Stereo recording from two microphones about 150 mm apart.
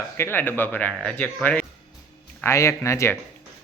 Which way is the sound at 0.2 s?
15° left (ahead or behind).